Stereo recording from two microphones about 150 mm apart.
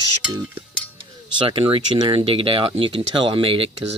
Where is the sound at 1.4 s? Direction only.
35° right (ahead or behind).